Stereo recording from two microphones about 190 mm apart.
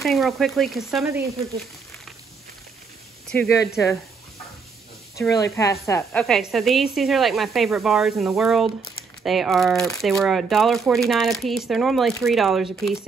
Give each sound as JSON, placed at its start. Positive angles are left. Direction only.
{"t": 0.0, "sound": "speech", "side_deg": 0}
{"t": 3.3, "sound": "speech", "side_deg": 10}
{"t": 5.3, "sound": "speech", "side_deg": 15}
{"t": 6.2, "sound": "speech", "side_deg": 0}